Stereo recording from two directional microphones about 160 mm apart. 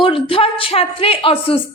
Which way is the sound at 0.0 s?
35° left (ahead or behind).